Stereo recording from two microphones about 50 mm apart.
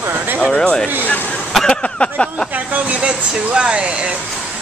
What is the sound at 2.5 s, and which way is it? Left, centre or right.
Vehicle, right.